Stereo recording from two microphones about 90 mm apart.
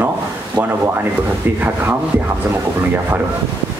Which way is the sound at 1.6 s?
25° right (ahead or behind).